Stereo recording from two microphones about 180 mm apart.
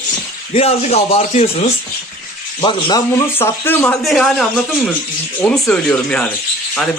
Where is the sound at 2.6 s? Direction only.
25° left (ahead or behind).